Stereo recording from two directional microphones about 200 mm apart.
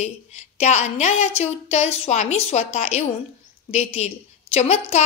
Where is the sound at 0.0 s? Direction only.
35° left (ahead or behind).